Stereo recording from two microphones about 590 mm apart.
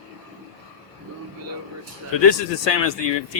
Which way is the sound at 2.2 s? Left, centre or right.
Left.